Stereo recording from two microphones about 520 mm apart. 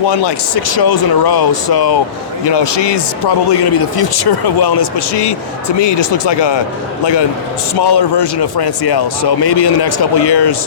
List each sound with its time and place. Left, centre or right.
0.1 s a man's voice: left